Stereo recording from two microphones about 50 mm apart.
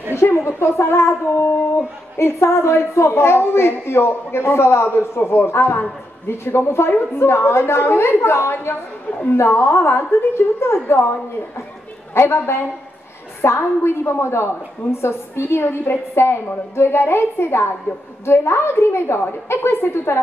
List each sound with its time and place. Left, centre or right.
0.1 s a woman's voice: left